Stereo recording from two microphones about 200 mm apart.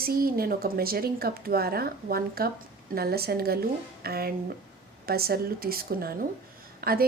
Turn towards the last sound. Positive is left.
turn(degrees=-50)  # may be behind; listen again after turning